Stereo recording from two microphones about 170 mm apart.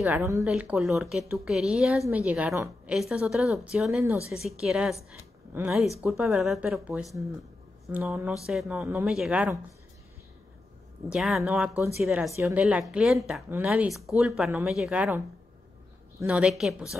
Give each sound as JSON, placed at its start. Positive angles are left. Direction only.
{"t": 0.0, "sound": "a woman's voice", "side_deg": -10}
{"t": 8.0, "sound": "a woman's voice", "side_deg": -15}
{"t": 8.5, "sound": "speech", "side_deg": -5}
{"t": 11.1, "sound": "a woman's voice", "side_deg": 0}
{"t": 16.3, "sound": "speech", "side_deg": -5}